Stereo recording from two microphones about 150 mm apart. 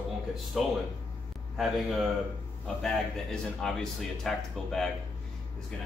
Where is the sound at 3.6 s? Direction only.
5° left (ahead or behind).